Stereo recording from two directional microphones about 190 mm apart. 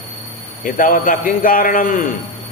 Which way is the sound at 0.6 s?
45° left (ahead or behind).